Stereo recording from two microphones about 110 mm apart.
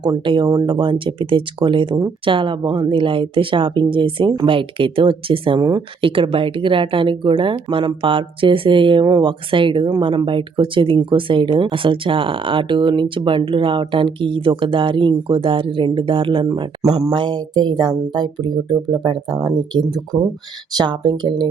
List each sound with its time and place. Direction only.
0.0 s speech: 45° right (ahead or behind)